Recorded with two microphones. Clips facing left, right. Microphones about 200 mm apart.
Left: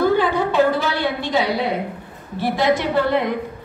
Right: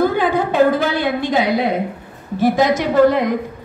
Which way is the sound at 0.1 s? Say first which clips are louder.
Right 1 dB; 50° right (ahead or behind).